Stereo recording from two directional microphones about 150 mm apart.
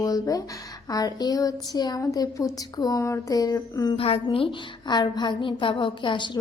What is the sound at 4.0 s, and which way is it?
A woman's voice, 40° left (ahead or behind).